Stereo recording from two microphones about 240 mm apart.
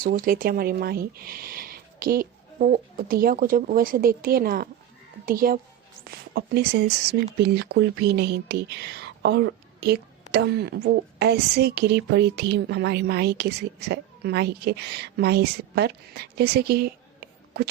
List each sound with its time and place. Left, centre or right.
0.0 s speech: right